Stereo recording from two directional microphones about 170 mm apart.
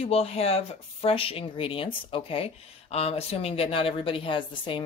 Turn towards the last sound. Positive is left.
turn(degrees=30)  # may be behind; listen again after turning